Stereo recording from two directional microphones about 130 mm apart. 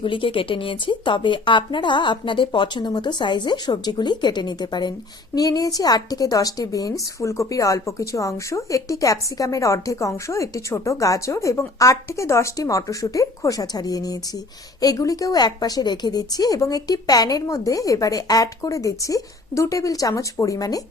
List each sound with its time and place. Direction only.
0.0 s speech: 45° left (ahead or behind)